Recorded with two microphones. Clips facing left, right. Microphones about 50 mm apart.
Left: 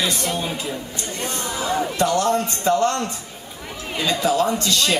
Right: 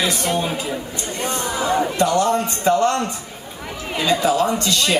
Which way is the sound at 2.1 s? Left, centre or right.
Right.